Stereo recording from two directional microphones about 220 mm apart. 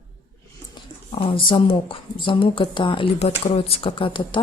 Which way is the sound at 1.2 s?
25° left (ahead or behind).